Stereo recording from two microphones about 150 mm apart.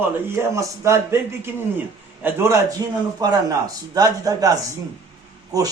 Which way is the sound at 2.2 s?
15° right (ahead or behind).